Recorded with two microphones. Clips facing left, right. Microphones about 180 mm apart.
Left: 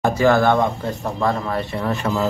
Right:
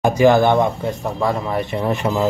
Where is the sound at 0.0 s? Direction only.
15° right (ahead or behind).